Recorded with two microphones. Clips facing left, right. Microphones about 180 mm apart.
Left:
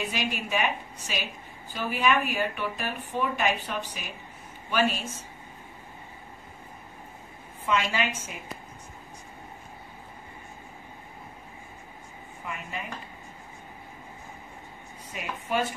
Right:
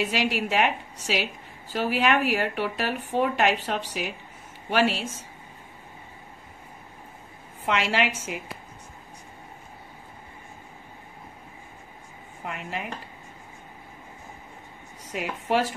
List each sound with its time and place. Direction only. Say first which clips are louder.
0.0 s a woman's voice: right 6 dB; 75° right (ahead or behind)
7.6 s a woman's voice: right 2 dB; 75° right (ahead or behind)
12.4 s speech: right 3 dB; 70° right (ahead or behind)
15.1 s a woman's voice: right 5 dB; 70° right (ahead or behind)